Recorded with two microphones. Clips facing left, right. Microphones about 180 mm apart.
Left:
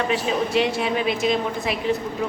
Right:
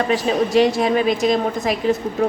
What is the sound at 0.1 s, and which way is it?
A woman's voice, 40° right (ahead or behind).